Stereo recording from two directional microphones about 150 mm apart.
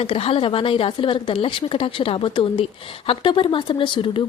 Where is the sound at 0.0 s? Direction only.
40° left (ahead or behind).